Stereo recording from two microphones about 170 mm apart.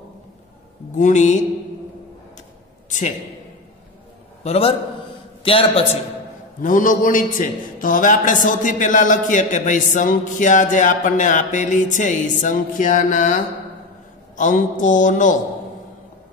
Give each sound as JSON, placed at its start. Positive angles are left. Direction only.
{"t": 0.9, "sound": "a man's voice", "side_deg": 45}
{"t": 4.4, "sound": "a man's voice", "side_deg": 35}
{"t": 6.6, "sound": "a man's voice", "side_deg": 50}